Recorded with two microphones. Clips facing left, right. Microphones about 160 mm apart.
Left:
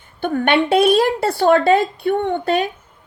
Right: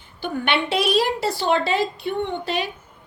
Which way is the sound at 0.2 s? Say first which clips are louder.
Left 7 dB; 50° left (ahead or behind).